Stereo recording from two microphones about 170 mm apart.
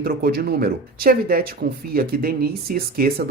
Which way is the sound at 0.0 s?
60° right (ahead or behind).